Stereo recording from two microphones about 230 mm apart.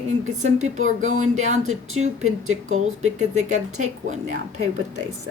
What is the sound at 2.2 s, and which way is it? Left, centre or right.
Speech, right.